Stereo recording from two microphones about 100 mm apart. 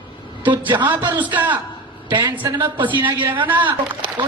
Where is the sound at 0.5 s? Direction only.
50° right (ahead or behind).